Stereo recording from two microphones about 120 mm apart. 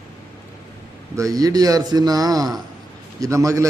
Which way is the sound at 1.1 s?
30° right (ahead or behind).